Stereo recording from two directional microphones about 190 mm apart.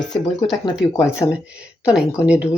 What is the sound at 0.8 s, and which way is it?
Speech, 5° right (ahead or behind).